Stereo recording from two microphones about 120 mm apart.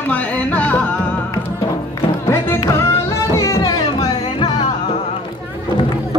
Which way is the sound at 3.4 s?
30° left (ahead or behind).